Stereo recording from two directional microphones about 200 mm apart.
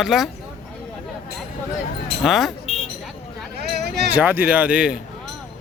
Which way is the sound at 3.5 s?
55° right (ahead or behind).